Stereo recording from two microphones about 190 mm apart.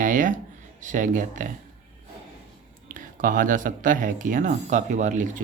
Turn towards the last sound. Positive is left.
turn(degrees=-40)  # may be behind; listen again after turning